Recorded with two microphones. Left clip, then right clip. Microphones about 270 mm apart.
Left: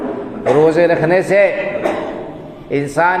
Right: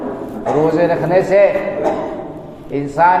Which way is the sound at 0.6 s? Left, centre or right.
Left.